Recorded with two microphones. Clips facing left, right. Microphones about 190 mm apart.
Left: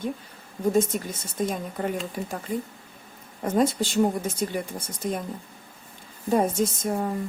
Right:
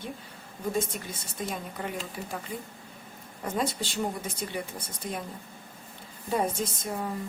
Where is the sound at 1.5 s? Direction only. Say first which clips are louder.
Left 6 dB; 45° left (ahead or behind).